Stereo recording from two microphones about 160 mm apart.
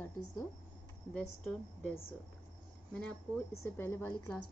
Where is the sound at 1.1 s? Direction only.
5° left (ahead or behind).